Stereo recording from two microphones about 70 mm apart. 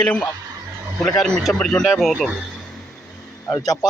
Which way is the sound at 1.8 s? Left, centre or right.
Centre.